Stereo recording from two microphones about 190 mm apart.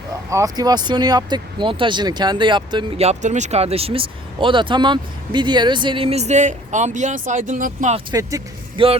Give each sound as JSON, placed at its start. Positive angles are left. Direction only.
{"t": 0.3, "sound": "speech", "side_deg": -15}
{"t": 8.8, "sound": "speech", "side_deg": -25}